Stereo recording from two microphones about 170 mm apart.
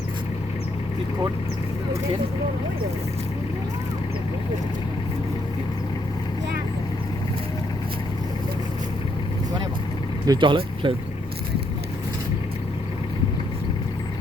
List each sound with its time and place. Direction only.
10.2 s speech: 30° right (ahead or behind)